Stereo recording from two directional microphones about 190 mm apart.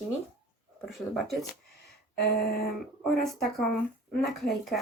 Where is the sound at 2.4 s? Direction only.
55° left (ahead or behind).